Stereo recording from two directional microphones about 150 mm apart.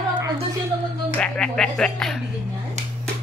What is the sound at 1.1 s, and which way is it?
Speech, 5° left (ahead or behind).